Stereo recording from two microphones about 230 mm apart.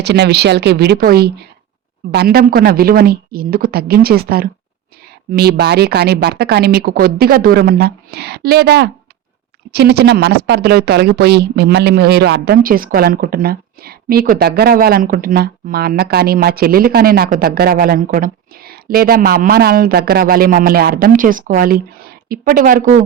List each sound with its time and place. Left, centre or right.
0.0 s speech: right